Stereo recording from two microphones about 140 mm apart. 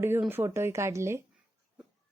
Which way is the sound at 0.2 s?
15° right (ahead or behind).